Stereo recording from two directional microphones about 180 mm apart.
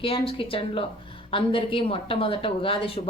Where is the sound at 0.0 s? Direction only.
30° left (ahead or behind).